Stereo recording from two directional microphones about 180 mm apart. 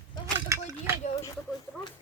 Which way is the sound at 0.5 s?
15° right (ahead or behind).